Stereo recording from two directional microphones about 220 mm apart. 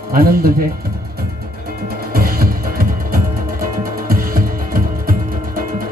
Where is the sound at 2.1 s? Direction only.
40° right (ahead or behind).